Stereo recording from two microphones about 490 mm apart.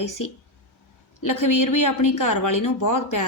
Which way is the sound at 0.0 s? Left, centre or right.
Left.